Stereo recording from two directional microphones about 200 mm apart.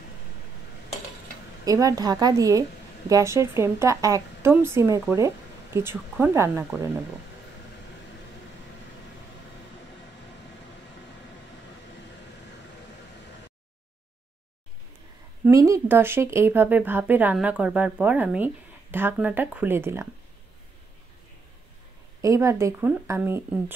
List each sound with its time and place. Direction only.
1.6 s speech: 15° right (ahead or behind)
15.4 s speech: 15° right (ahead or behind)
22.2 s speech: 15° right (ahead or behind)